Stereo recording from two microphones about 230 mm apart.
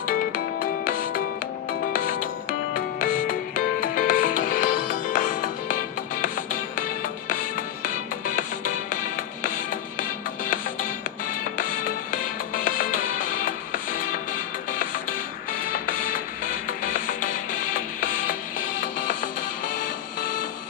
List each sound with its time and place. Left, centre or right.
0.1 s music: left
11.3 s music: left
15.6 s music: left